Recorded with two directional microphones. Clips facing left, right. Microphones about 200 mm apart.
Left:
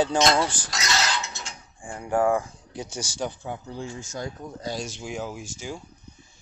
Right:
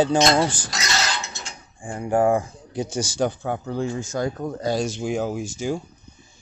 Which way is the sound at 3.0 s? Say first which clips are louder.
Right 8 dB; 65° right (ahead or behind).